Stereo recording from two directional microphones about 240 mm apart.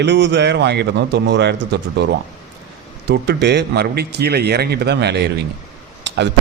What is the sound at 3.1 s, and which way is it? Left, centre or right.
A man's voice, right.